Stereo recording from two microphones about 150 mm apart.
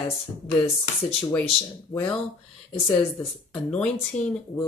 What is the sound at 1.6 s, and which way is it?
Speech, 10° left (ahead or behind).